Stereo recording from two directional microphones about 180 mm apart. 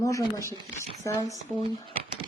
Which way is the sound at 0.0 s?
20° left (ahead or behind).